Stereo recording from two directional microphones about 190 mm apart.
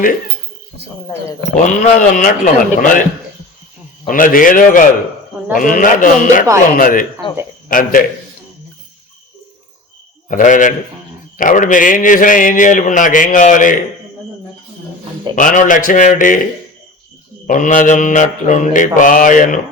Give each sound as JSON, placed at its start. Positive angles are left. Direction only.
{"t": 1.5, "sound": "speech", "side_deg": 40}
{"t": 4.0, "sound": "speech", "side_deg": 45}
{"t": 10.2, "sound": "speech", "side_deg": 45}
{"t": 15.4, "sound": "speech", "side_deg": 45}
{"t": 17.4, "sound": "a man's voice", "side_deg": 45}